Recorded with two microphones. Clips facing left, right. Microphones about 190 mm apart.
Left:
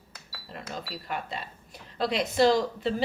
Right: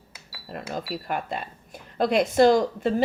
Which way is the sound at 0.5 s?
55° right (ahead or behind).